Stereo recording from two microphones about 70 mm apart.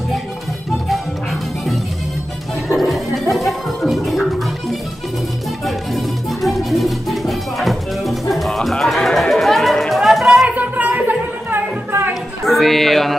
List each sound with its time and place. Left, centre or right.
2.7 s gargling: centre
6.4 s music: centre
10.5 s music: right
12.1 s music: centre